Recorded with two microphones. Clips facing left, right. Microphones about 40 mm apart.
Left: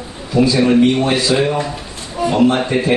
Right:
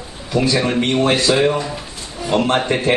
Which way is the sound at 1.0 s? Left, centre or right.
Right.